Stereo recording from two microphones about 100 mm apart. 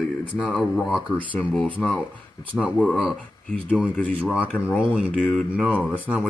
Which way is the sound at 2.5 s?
10° right (ahead or behind).